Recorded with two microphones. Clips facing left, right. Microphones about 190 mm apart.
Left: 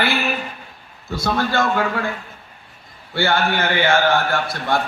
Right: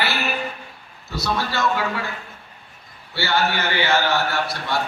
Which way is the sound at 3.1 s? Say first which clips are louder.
Left 3 dB; 50° left (ahead or behind).